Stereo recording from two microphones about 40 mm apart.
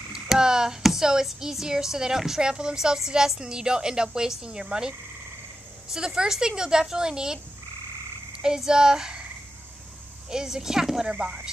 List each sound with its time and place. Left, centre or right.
0.4 s a sound: centre
1.2 s a woman's voice: centre
5.9 s a woman's voice: centre
8.5 s a woman's voice: centre
10.3 s a woman's voice: centre